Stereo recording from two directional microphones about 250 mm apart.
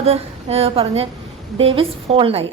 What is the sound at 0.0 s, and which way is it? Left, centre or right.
A woman's voice, right.